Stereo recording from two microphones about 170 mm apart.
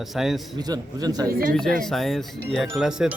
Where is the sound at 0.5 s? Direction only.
20° right (ahead or behind).